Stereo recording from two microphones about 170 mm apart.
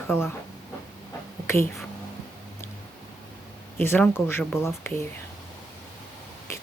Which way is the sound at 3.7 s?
10° left (ahead or behind).